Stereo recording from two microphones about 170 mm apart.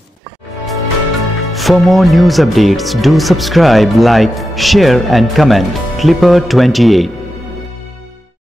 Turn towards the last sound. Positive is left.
turn(degrees=0)  # may be behind; listen again after turning